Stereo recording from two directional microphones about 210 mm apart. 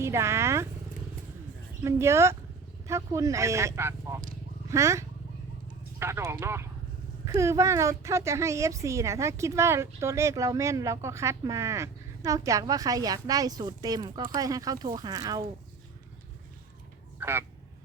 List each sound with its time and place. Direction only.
0.0 s speech: 10° right (ahead or behind)
1.8 s a woman's voice: 15° right (ahead or behind)
17.2 s speech: 10° right (ahead or behind)